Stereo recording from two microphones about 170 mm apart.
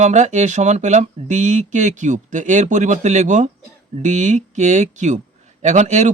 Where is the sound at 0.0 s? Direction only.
45° right (ahead or behind).